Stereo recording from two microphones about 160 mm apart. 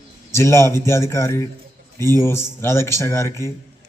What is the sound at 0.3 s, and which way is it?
Speech, 15° left (ahead or behind).